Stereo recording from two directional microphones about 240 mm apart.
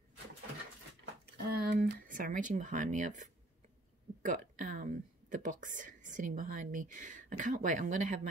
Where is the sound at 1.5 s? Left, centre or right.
Right.